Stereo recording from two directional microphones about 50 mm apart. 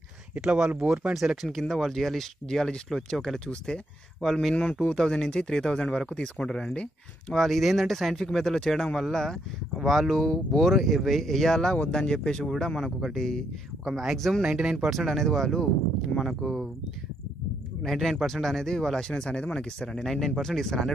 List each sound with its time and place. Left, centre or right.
1.1 s speech: centre
4.3 s speech: centre
4.8 s speech: centre
7.3 s speech: centre
14.4 s speech: centre
14.9 s speech: centre
16.2 s speech: centre
17.8 s speech: centre